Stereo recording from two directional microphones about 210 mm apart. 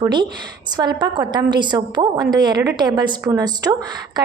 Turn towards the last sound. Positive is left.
turn(degrees=-20)  # may be behind; listen again after turning